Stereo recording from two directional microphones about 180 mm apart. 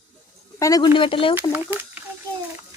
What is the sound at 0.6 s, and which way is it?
Speech, 20° left (ahead or behind).